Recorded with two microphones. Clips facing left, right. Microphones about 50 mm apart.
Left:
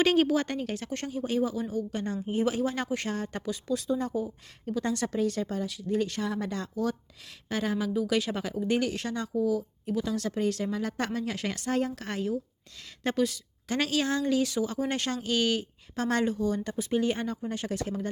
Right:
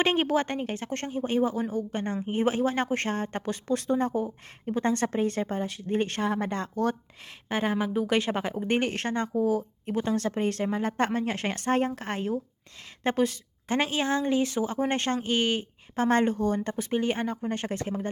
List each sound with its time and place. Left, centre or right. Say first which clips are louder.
0.0 s speech: left 1 dB; right
4.6 s speech: right 3 dB; right
6.3 s speech: right 3 dB; right
16.3 s speech: right 2 dB; right